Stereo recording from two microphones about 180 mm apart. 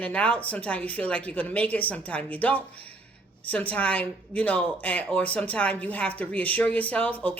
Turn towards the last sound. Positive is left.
turn(degrees=10)  # may be behind; listen again after turning